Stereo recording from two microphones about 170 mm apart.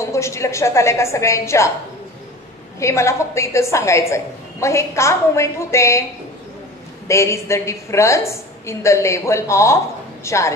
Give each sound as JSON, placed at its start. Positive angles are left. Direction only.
{"t": 0.0, "sound": "a woman's voice", "side_deg": 15}
{"t": 2.8, "sound": "a woman's voice", "side_deg": 15}
{"t": 7.1, "sound": "a woman's voice", "side_deg": 15}